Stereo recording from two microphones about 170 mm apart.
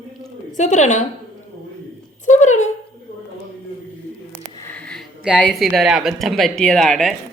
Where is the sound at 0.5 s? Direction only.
45° left (ahead or behind).